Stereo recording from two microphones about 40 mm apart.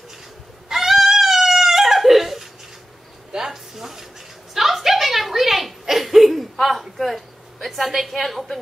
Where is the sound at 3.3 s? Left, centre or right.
Centre.